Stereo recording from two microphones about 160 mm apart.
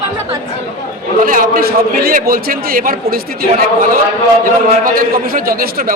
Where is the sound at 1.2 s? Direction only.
65° right (ahead or behind).